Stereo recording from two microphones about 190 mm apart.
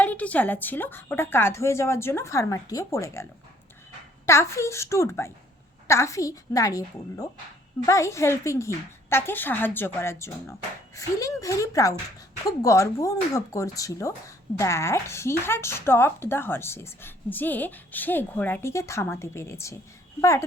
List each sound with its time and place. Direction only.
0.0 s speech: 10° left (ahead or behind)
4.3 s speech: 15° left (ahead or behind)